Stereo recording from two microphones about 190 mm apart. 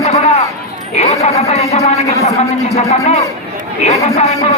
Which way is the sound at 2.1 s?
15° left (ahead or behind).